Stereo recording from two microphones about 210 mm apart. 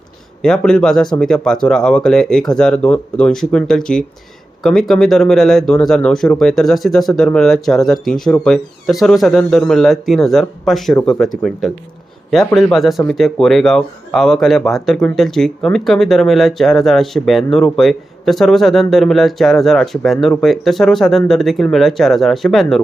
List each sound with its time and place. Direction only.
0.4 s speech: 5° left (ahead or behind)
12.3 s speech: centre (ahead or behind)